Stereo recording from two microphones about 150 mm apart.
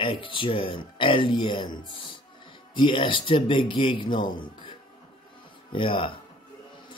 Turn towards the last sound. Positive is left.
turn(degrees=35)  # may be behind; listen again after turning